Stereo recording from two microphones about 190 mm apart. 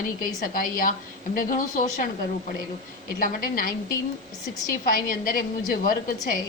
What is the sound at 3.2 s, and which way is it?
Speech, 50° left (ahead or behind).